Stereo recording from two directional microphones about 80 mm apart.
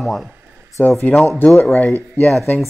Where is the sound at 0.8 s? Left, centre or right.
Left.